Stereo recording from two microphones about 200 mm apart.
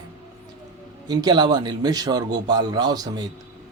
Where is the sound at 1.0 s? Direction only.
20° right (ahead or behind).